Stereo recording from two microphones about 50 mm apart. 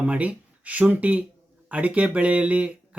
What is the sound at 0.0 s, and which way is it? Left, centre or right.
Speech, right.